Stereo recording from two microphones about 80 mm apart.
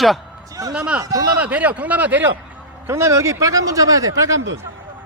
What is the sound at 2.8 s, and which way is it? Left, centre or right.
Speech, right.